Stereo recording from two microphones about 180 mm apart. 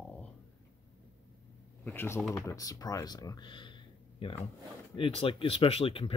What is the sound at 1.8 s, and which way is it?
Speech, 10° left (ahead or behind).